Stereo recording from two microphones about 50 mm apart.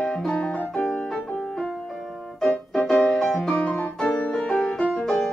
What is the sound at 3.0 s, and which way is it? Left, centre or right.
Music, centre.